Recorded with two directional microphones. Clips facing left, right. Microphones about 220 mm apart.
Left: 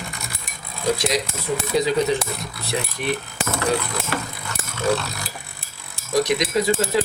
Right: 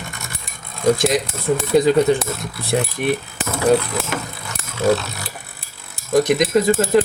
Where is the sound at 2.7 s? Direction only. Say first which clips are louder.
Right 7 dB; 50° right (ahead or behind).